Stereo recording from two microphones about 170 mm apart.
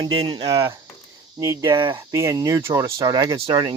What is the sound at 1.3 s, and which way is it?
Speech, 20° right (ahead or behind).